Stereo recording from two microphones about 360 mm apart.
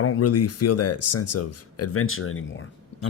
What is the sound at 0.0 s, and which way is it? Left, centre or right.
Speech, left.